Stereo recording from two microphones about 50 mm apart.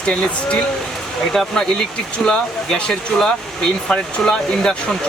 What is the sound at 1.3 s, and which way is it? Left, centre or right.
Speech, centre.